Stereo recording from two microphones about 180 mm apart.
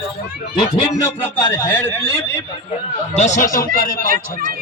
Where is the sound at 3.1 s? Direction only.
40° left (ahead or behind).